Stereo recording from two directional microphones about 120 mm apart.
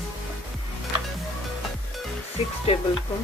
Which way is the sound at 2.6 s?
55° left (ahead or behind).